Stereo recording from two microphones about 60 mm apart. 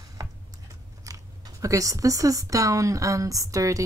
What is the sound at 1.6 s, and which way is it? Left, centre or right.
Speech, right.